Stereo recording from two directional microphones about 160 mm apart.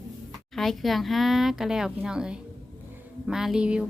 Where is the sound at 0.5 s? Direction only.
Centre (ahead or behind).